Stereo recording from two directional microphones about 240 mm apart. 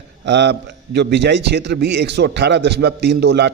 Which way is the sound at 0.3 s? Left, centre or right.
Right.